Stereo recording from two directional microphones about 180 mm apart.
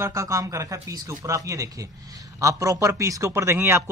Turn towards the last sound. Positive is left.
turn(degrees=-15)  # may be behind; listen again after turning